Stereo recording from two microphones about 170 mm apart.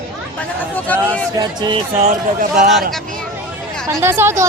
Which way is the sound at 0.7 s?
10° left (ahead or behind).